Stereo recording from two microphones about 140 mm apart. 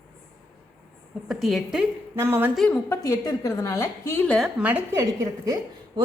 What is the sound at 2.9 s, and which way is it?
A woman's voice, 25° left (ahead or behind).